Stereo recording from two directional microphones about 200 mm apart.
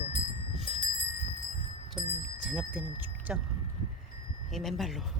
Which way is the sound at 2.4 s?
5° right (ahead or behind).